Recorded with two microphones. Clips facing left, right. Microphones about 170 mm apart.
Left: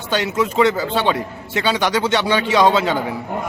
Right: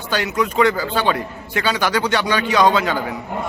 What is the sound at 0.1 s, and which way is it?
A man's voice, 25° left (ahead or behind).